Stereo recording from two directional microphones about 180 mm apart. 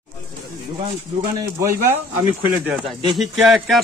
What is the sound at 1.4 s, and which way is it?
Speech, 15° right (ahead or behind).